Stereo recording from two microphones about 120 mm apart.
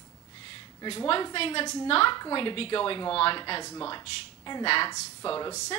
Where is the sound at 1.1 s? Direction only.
45° left (ahead or behind).